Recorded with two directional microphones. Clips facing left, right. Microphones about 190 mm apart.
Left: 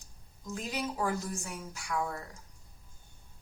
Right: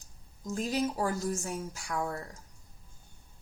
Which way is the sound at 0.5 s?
40° right (ahead or behind).